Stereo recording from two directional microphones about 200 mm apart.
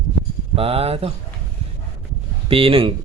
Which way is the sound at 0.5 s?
30° right (ahead or behind).